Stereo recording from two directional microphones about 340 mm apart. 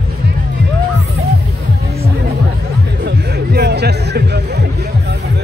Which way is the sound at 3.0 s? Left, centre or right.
Right.